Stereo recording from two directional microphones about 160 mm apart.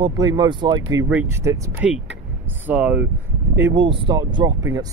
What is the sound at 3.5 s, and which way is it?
Speech, 20° right (ahead or behind).